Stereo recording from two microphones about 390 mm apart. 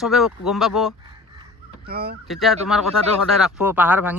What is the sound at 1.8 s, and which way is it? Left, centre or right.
Speech, right.